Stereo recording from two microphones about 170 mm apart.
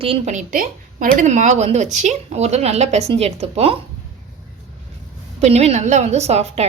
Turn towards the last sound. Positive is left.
turn(degrees=-40)  # may be behind; listen again after turning